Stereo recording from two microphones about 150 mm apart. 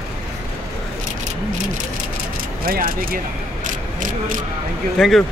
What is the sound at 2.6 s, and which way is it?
Speech, 75° right (ahead or behind).